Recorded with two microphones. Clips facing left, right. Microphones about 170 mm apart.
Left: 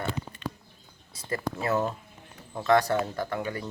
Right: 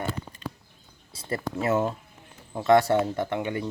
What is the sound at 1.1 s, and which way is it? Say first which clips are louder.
Speech: right 1 dB; 25° right (ahead or behind).